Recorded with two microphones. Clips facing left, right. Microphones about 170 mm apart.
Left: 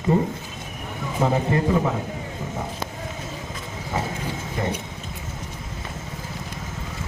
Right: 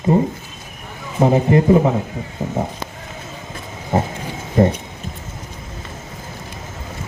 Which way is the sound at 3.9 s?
35° right (ahead or behind).